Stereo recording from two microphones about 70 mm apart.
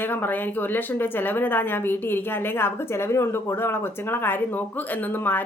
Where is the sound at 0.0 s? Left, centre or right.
Left.